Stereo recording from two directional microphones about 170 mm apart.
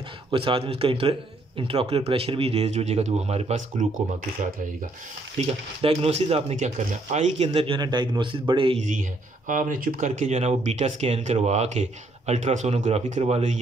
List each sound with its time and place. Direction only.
0.3 s speech: 30° right (ahead or behind)
5.4 s speech: 40° right (ahead or behind)
9.5 s speech: 50° right (ahead or behind)